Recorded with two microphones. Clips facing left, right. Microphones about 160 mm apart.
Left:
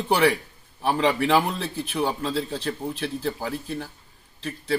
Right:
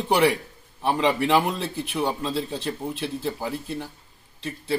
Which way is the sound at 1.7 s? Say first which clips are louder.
Left 3 dB; centre (ahead or behind).